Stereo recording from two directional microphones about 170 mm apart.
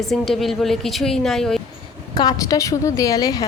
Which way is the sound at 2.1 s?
20° left (ahead or behind).